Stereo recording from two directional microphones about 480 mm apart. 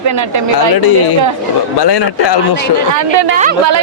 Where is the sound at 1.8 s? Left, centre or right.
Left.